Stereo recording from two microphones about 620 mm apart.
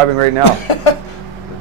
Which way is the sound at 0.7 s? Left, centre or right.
Left.